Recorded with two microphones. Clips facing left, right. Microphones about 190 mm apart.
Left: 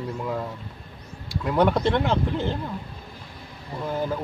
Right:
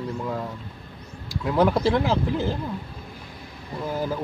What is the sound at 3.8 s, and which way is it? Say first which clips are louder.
Speech: even; 5° right (ahead or behind).